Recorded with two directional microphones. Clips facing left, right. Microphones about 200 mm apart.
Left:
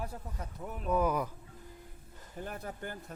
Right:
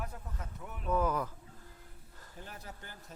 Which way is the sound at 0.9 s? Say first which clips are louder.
Left 2 dB; 15° left (ahead or behind).